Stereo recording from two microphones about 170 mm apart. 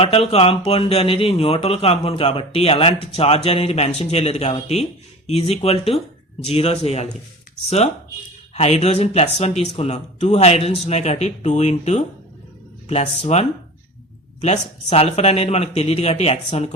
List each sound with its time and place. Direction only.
0.0 s speech: 35° left (ahead or behind)
8.5 s speech: 40° left (ahead or behind)
14.4 s speech: 40° left (ahead or behind)